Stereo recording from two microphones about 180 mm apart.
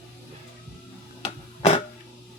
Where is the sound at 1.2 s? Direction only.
35° left (ahead or behind).